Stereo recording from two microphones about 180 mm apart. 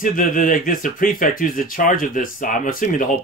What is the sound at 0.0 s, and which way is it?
Speech, 50° left (ahead or behind).